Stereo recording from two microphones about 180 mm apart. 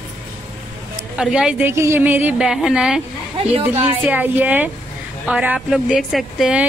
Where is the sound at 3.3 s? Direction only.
30° right (ahead or behind).